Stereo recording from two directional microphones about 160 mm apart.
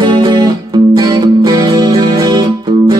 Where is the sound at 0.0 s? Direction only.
30° right (ahead or behind).